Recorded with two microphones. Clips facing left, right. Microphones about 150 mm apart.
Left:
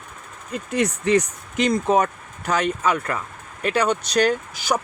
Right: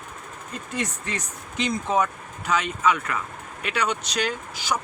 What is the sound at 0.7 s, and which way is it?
Speech, 75° left (ahead or behind).